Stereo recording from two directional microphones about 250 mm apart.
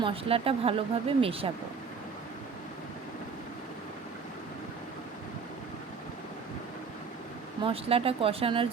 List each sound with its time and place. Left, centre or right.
0.0 s speech: right
7.6 s speech: right